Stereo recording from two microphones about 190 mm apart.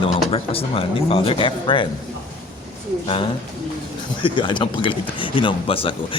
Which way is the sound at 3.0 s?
25° left (ahead or behind).